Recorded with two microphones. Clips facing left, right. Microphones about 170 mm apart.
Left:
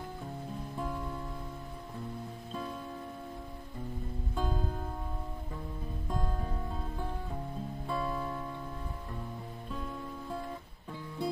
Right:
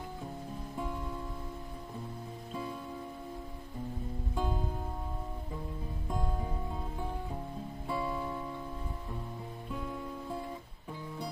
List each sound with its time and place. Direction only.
4.4 s music: 15° right (ahead or behind)
6.1 s music: 15° right (ahead or behind)
7.9 s music: 5° right (ahead or behind)